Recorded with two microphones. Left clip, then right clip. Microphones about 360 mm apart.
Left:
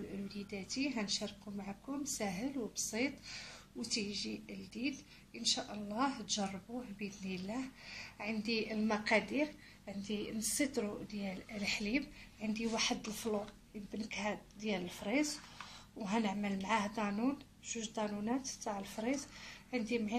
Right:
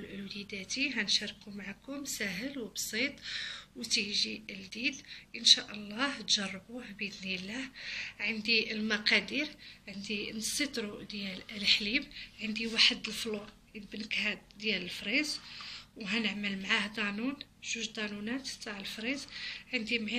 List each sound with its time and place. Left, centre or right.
0.5 s a woman's voice: centre